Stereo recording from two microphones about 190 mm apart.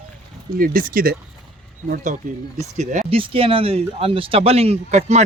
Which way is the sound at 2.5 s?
40° right (ahead or behind).